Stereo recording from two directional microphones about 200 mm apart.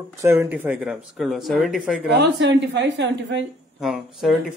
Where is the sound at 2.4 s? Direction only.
60° right (ahead or behind).